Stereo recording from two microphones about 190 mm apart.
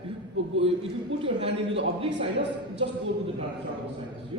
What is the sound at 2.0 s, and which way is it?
Speech, 65° right (ahead or behind).